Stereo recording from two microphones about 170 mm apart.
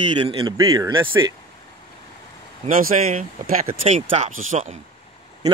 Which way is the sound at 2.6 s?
50° right (ahead or behind).